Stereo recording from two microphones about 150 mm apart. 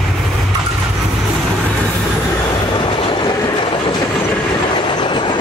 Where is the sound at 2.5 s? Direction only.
35° left (ahead or behind).